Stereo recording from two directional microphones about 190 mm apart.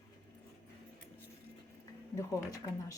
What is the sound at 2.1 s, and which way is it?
Speech, 20° left (ahead or behind).